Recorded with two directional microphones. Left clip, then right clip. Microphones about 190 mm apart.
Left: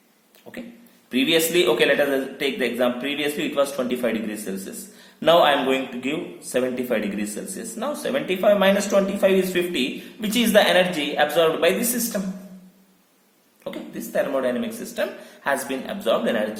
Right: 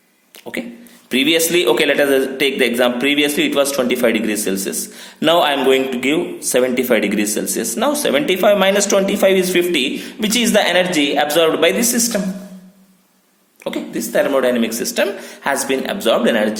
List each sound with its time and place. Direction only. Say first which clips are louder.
0.5 s a man's voice: right 12 dB; 40° right (ahead or behind)
13.7 s speech: right 10 dB; 40° right (ahead or behind)